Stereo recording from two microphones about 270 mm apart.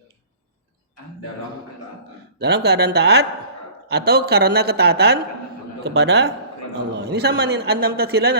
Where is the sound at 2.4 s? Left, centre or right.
Right.